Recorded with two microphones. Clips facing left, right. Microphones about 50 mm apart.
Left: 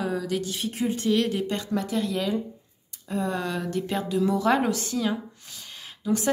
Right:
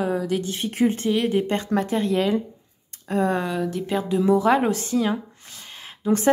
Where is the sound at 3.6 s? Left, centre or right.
Centre.